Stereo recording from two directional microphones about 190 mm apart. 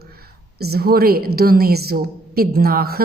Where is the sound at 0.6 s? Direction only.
55° right (ahead or behind).